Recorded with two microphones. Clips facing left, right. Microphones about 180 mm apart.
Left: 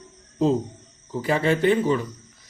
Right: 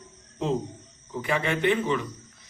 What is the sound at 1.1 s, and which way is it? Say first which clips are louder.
Speech: left 5 dB; 35° left (ahead or behind).